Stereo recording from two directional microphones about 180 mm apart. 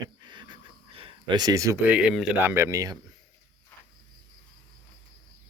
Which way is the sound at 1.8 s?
5° right (ahead or behind).